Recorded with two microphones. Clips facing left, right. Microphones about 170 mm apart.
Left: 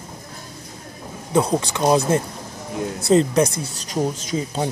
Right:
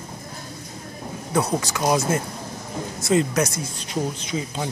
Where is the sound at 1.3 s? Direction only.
25° left (ahead or behind).